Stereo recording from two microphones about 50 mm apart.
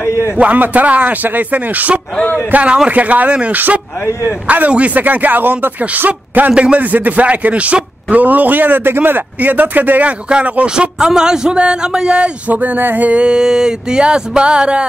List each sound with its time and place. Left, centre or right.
0.4 s a man's voice: right
3.5 s a man's voice: right
4.0 s a man's voice: left
4.5 s a man's voice: right
6.5 s a man's voice: right
10.7 s a sound: centre
12.4 s a man's voice: right
13.1 s a sound: centre